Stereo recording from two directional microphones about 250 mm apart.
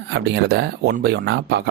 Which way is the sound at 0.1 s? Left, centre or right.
Right.